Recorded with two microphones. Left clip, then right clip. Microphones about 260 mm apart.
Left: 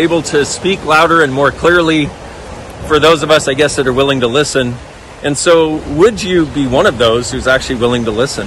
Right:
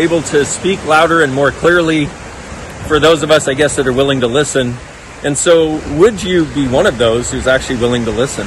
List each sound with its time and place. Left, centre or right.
0.3 s a man's voice: centre